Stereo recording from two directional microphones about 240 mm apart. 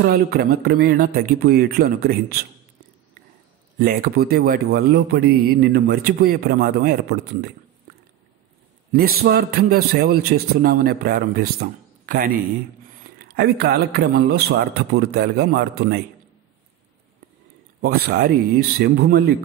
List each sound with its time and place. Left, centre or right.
0.0 s a man's voice: right
3.7 s a man's voice: right
9.2 s a man's voice: right
17.8 s a man's voice: right